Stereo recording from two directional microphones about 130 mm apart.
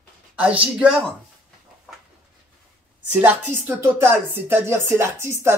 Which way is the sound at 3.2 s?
15° right (ahead or behind).